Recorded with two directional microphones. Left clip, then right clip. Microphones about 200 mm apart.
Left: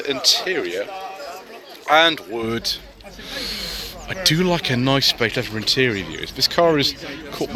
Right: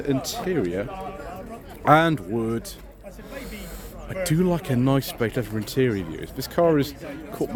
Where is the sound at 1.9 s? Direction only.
20° right (ahead or behind).